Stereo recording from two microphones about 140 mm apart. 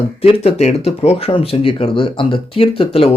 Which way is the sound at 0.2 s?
45° left (ahead or behind).